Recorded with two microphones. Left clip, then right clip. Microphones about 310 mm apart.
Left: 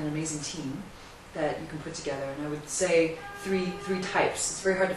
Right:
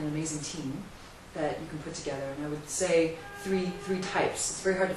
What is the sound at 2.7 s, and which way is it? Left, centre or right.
A woman's voice, centre.